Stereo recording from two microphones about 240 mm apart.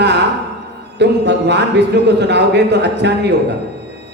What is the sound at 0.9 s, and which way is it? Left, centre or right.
Speech, right.